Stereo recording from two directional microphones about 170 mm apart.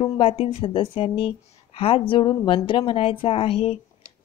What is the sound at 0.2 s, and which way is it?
Speech, 35° left (ahead or behind).